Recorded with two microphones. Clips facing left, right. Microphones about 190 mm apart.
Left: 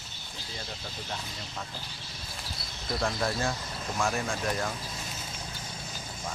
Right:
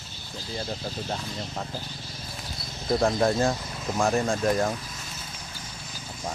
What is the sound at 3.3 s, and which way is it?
Speech, 35° right (ahead or behind).